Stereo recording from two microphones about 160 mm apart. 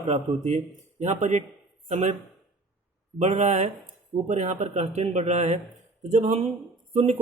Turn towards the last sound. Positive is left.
turn(degrees=-45)  # may be behind; listen again after turning